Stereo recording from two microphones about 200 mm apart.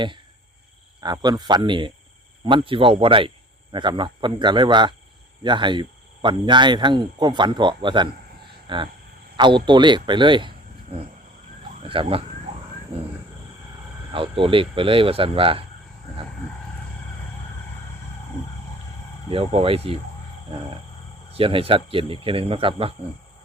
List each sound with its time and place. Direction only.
1.0 s speech: 20° right (ahead or behind)
14.1 s speech: 25° right (ahead or behind)
19.3 s speech: 30° right (ahead or behind)
21.3 s speech: 25° right (ahead or behind)